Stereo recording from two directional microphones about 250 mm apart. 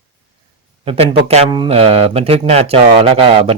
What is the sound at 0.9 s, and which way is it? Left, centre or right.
Speech, right.